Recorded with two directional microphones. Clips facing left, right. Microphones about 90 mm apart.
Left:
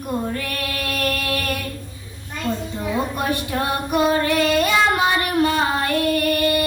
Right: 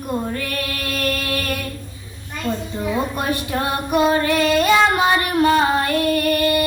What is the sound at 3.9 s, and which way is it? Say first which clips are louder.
Child singing: right 2 dB; 25° right (ahead or behind).